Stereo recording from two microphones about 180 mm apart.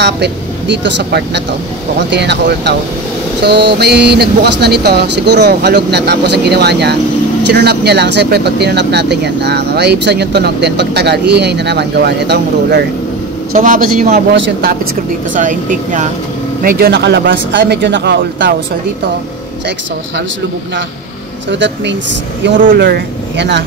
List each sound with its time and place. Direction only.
0.0 s speech: 75° right (ahead or behind)
13.5 s speech: 50° right (ahead or behind)
14.3 s speech: 60° right (ahead or behind)
15.3 s speech: 45° right (ahead or behind)
16.6 s speech: 60° right (ahead or behind)
21.5 s speech: 80° right